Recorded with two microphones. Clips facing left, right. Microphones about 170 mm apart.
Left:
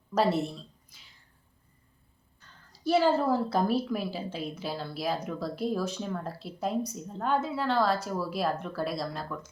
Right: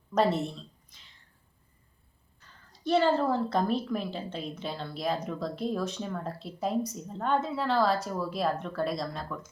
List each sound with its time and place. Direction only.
0.1 s a woman's voice: 5° left (ahead or behind)
2.4 s speech: 5° left (ahead or behind)